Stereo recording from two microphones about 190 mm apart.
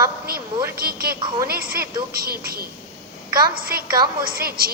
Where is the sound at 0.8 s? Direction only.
50° right (ahead or behind).